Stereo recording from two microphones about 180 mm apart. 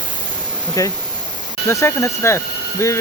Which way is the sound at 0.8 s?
20° left (ahead or behind).